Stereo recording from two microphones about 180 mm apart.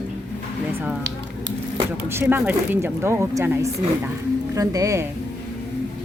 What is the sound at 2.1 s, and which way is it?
Speech, 10° right (ahead or behind).